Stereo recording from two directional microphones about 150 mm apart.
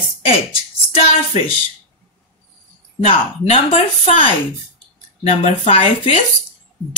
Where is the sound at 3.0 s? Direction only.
40° left (ahead or behind).